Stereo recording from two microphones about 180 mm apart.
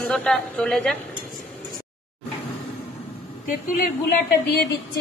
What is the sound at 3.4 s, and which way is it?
Speech, 50° left (ahead or behind).